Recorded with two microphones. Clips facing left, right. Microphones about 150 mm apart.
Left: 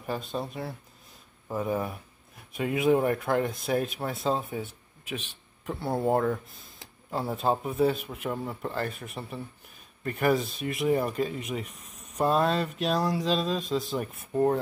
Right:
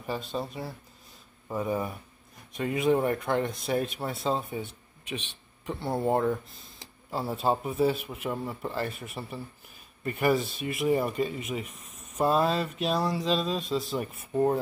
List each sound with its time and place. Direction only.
0.0 s speech: centre (ahead or behind)